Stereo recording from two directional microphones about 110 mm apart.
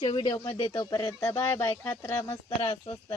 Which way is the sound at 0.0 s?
45° left (ahead or behind).